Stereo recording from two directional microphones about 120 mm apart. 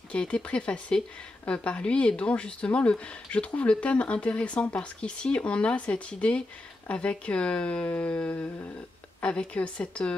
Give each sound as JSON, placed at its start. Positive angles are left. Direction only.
{"t": 0.1, "sound": "speech", "side_deg": 10}